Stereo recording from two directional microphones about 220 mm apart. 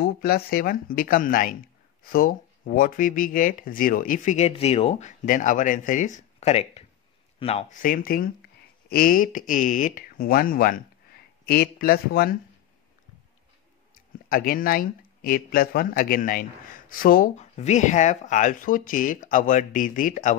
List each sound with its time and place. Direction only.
0.0 s speech: 45° left (ahead or behind)
14.3 s speech: 40° left (ahead or behind)